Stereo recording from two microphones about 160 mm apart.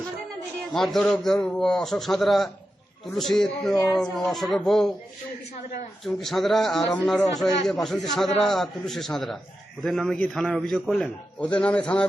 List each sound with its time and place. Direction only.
0.7 s a man's voice: centre (ahead or behind)
6.1 s a man's voice: centre (ahead or behind)